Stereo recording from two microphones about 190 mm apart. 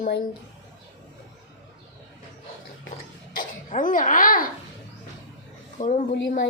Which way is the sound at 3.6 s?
45° left (ahead or behind).